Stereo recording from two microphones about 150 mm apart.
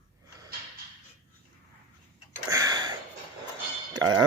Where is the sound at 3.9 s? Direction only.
25° right (ahead or behind).